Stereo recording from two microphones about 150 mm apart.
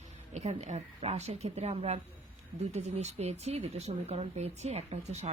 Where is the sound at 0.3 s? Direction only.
50° right (ahead or behind).